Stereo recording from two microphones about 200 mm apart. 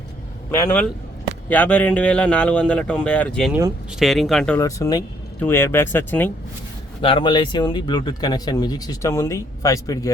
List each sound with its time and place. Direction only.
0.5 s speech: 10° left (ahead or behind)
4.6 s speech: 20° left (ahead or behind)
7.0 s speech: 25° left (ahead or behind)